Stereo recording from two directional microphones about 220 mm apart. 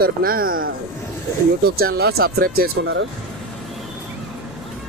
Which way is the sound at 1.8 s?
45° right (ahead or behind).